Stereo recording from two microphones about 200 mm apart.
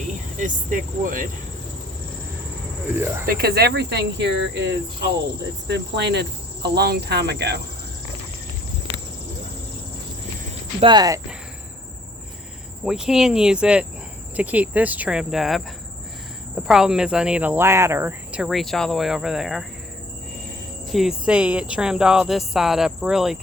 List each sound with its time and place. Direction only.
0.3 s speech: 40° right (ahead or behind)
3.2 s cricket: 50° right (ahead or behind)
10.8 s speech: 20° right (ahead or behind)
12.8 s speech: 5° right (ahead or behind)
16.6 s speech: 5° right (ahead or behind)
20.9 s speech: centre (ahead or behind)